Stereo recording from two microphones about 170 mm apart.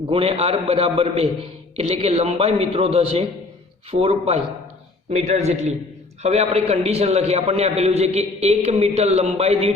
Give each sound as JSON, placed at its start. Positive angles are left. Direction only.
{"t": 0.1, "sound": "a man's voice", "side_deg": -35}